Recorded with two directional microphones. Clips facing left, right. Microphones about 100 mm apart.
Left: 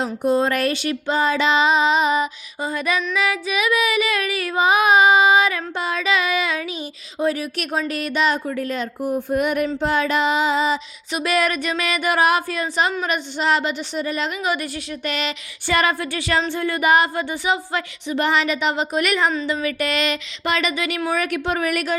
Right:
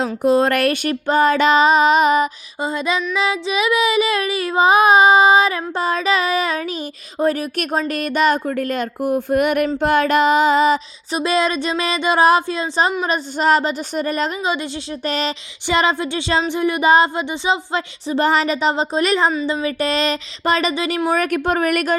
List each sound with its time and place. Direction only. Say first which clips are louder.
0.2 s speech: right 4 dB; 80° right; by 2.3 s 55° right (ahead or behind)
2.6 s speech: right 2 dB; 25° right (ahead or behind)
3.2 s child singing: right 2 dB; 30° right (ahead or behind)
7.2 s speech: right 3 dB; 50° right (ahead or behind)
11.1 s speech: right 2 dB; 25° right (ahead or behind)
13.1 s speech: right 4 dB; 40° right (ahead or behind)
14.4 s speech: right 2 dB; 25° right (ahead or behind)
15.0 s child singing: right 4 dB; 35° right (ahead or behind)
15.6 s speech: right 2 dB; 20° right (ahead or behind)
16.9 s child singing: right 2 dB; 25° right (ahead or behind); by 21.9 s 50° right (ahead or behind)